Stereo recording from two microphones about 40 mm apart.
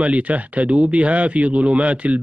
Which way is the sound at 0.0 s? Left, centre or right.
Right.